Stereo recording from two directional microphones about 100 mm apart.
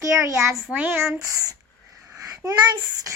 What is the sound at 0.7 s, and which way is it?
Speech, 20° right (ahead or behind).